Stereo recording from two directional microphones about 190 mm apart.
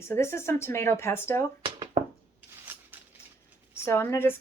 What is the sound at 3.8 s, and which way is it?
Speech, 15° left (ahead or behind).